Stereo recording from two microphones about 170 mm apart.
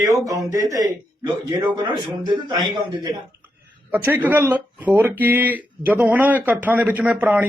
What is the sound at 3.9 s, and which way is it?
Speech, 10° right (ahead or behind).